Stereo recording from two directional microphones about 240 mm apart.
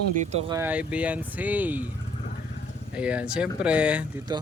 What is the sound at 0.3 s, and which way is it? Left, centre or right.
Speech, right.